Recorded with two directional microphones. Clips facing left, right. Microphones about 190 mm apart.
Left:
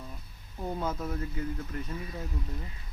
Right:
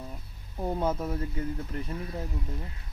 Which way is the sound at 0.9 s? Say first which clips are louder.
Right 4 dB; 10° right (ahead or behind).